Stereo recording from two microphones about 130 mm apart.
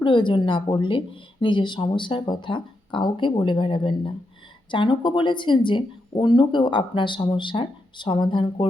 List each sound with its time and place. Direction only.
0.0 s speech: 40° left (ahead or behind)